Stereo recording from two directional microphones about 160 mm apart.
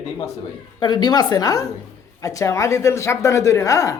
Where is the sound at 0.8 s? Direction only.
25° left (ahead or behind).